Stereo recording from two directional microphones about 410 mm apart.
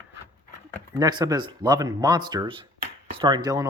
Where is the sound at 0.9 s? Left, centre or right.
Centre.